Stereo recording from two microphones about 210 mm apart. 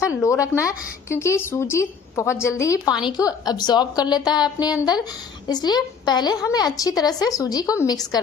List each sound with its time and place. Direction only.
0.0 s a woman's voice: 15° left (ahead or behind)